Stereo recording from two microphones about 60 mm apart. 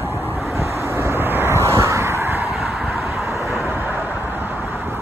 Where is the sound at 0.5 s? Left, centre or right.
Right.